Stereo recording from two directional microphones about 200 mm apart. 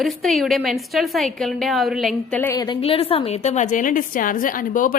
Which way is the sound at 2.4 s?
15° left (ahead or behind).